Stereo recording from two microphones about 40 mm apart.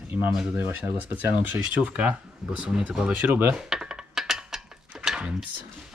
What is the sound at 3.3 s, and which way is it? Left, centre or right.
Cutlery, right.